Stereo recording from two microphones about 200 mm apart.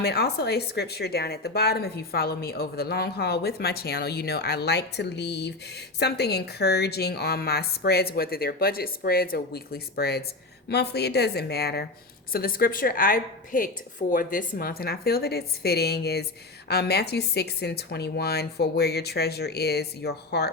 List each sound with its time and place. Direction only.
0.0 s a woman's voice: 55° left (ahead or behind)